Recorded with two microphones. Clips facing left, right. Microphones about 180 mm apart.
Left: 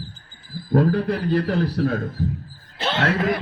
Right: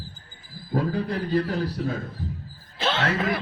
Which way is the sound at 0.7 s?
65° left (ahead or behind).